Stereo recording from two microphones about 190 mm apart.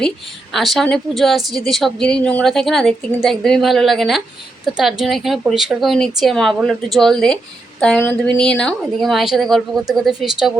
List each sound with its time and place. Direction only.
0.5 s a woman's voice: centre (ahead or behind)